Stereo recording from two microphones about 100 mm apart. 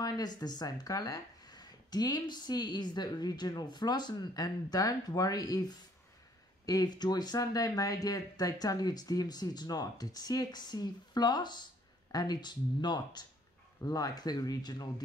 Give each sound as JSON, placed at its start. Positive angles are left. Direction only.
{"t": 0.0, "sound": "speech", "side_deg": 40}